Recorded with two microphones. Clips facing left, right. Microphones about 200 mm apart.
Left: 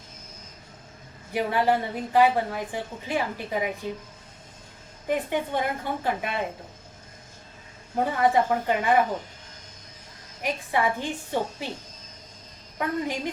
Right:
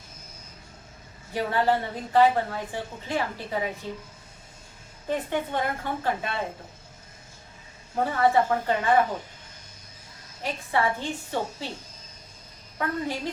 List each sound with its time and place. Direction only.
1.3 s a woman's voice: 15° left (ahead or behind)
5.0 s a woman's voice: 15° left (ahead or behind)
7.9 s a woman's voice: 15° left (ahead or behind)
10.4 s a woman's voice: 15° left (ahead or behind)
12.8 s a woman's voice: 15° left (ahead or behind)